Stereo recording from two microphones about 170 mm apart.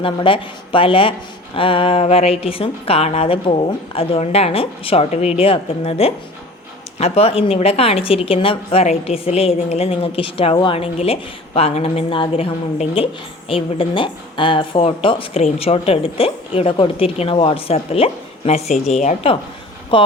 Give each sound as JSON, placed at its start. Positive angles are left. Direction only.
{"t": 0.0, "sound": "a woman's voice", "side_deg": 30}